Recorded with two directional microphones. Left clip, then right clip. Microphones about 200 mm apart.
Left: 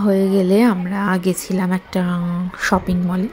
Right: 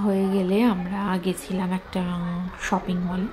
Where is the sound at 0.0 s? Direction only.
30° left (ahead or behind).